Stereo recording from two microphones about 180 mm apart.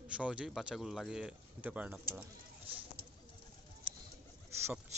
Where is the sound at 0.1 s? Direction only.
5° right (ahead or behind).